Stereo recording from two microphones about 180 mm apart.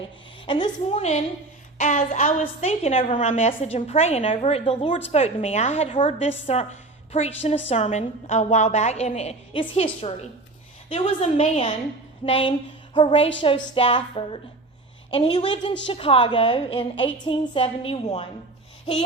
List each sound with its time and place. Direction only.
0.4 s a woman's voice: 25° left (ahead or behind)
13.7 s a sound: 30° left (ahead or behind)
15.9 s a woman's voice: 30° left (ahead or behind)